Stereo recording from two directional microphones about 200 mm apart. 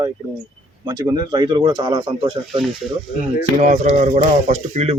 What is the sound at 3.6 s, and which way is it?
Speech, 35° right (ahead or behind).